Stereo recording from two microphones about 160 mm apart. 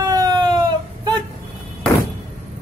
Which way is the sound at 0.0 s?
25° right (ahead or behind).